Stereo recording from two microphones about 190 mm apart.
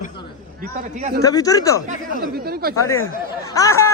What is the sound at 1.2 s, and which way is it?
Speech, 20° left (ahead or behind).